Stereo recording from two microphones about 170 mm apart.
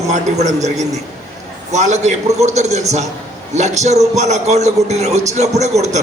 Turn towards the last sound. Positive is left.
turn(degrees=-40)  # may be behind; listen again after turning